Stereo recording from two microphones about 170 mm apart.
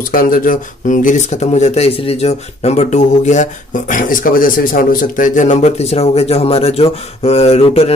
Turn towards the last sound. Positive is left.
turn(degrees=35)  # may be behind; listen again after turning